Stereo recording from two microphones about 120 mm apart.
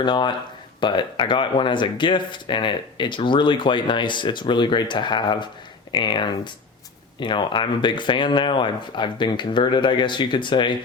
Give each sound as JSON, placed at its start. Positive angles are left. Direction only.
{"t": 0.0, "sound": "speech", "side_deg": 40}